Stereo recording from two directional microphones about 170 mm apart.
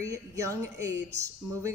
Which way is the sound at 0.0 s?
20° right (ahead or behind).